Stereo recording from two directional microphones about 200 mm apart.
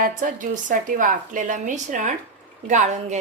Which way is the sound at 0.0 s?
40° right (ahead or behind).